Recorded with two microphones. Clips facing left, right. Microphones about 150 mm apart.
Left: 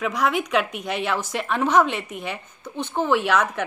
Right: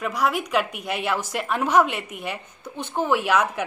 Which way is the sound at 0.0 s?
5° right (ahead or behind).